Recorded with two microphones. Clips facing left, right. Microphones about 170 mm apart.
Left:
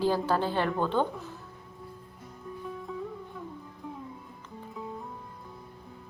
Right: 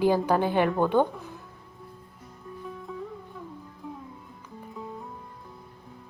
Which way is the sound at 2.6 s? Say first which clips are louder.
Even; centre (ahead or behind).